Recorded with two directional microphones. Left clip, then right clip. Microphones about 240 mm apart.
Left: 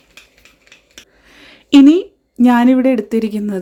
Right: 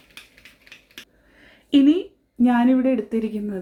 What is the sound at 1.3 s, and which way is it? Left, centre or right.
Speech, left.